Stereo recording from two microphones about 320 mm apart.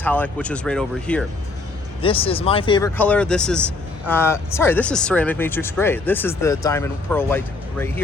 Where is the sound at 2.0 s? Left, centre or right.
Centre.